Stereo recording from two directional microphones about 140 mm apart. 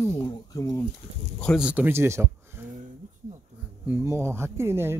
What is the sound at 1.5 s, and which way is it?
Speech, 10° right (ahead or behind).